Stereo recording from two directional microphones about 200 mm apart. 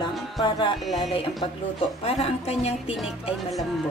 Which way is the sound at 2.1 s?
30° left (ahead or behind).